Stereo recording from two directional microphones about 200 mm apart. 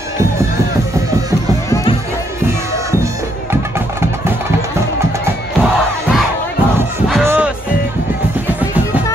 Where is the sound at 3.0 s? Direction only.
10° right (ahead or behind).